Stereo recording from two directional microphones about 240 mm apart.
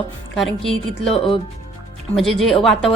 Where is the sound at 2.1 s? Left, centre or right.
Centre.